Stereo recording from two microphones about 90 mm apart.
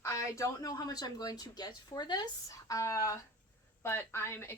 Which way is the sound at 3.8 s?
25° left (ahead or behind).